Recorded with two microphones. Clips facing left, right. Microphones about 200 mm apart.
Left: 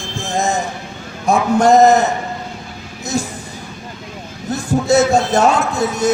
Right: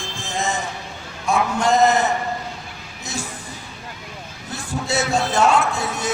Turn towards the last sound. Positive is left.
turn(degrees=40)  # may be behind; listen again after turning